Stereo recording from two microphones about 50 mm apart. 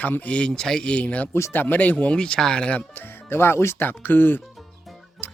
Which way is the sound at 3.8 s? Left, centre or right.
Left.